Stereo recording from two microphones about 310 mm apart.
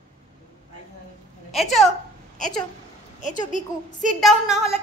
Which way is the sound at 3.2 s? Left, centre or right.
Left.